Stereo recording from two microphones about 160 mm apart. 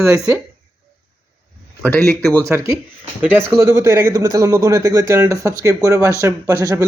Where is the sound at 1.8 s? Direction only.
5° left (ahead or behind).